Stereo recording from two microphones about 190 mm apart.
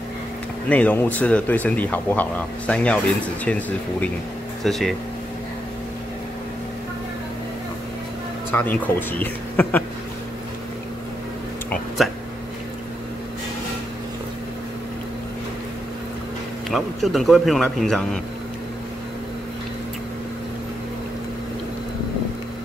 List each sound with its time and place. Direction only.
0.7 s speech: 10° left (ahead or behind)
8.5 s speech: 10° left (ahead or behind)
12.0 s speech: centre (ahead or behind)
16.7 s speech: centre (ahead or behind)